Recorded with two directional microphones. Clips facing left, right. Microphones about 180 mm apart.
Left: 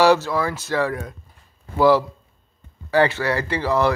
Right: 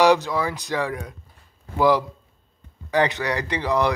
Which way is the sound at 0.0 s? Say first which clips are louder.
Left 1 dB; 15° right (ahead or behind).